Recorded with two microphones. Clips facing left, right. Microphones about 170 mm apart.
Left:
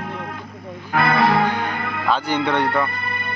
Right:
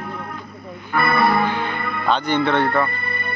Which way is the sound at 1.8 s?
90° left.